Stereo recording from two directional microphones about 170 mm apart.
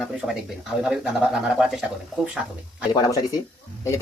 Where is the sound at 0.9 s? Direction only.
5° right (ahead or behind).